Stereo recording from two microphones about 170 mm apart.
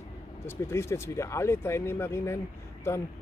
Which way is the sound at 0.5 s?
15° left (ahead or behind).